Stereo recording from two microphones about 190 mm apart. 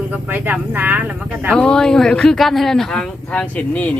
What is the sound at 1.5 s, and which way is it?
Speech, 5° left (ahead or behind).